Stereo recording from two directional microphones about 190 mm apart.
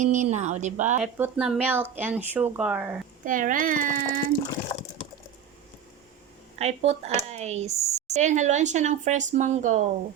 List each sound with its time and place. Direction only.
0.0 s speech: 40° right (ahead or behind)
1.0 s speech: 5° right (ahead or behind)
3.2 s speech: 45° right (ahead or behind)
6.6 s speech: 35° right (ahead or behind)